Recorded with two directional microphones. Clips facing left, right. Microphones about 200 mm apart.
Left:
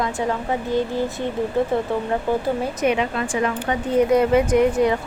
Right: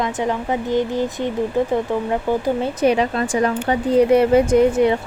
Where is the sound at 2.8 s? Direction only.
35° right (ahead or behind).